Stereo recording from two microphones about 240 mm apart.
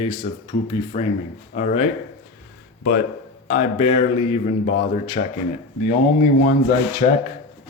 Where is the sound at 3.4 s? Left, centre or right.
Left.